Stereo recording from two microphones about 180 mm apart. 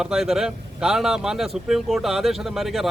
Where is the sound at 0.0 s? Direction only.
5° right (ahead or behind).